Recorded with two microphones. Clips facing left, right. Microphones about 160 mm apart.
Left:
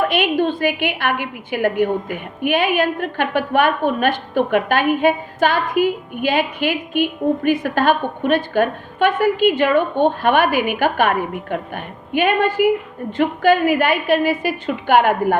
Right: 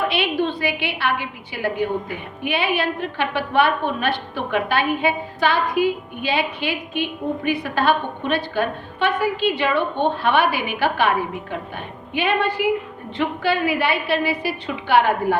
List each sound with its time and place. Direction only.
0.1 s a woman's voice: 50° left (ahead or behind)